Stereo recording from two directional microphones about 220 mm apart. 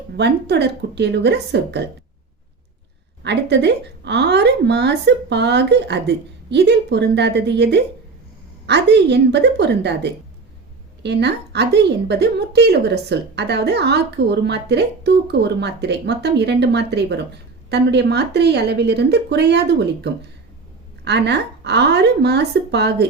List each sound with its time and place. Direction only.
0.2 s a woman's voice: 50° right (ahead or behind)
3.2 s a woman's voice: 50° right (ahead or behind)